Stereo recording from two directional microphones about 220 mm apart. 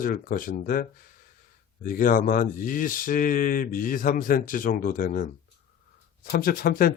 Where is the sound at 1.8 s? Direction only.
40° left (ahead or behind).